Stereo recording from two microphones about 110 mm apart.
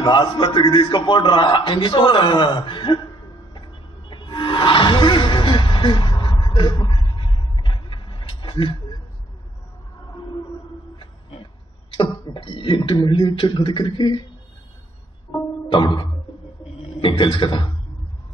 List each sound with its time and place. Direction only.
0.0 s a man's voice: 45° left (ahead or behind)
4.1 s wild animals: 45° left (ahead or behind)
6.4 s a sound: 45° left (ahead or behind)
11.9 s a man's voice: 55° left (ahead or behind)
15.7 s a man's voice: 45° left (ahead or behind)